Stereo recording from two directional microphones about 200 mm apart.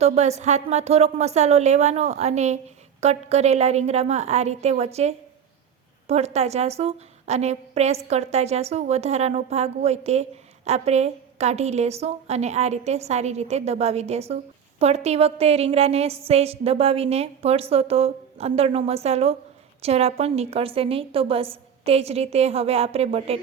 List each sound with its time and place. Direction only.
0.0 s a woman's voice: 35° right (ahead or behind)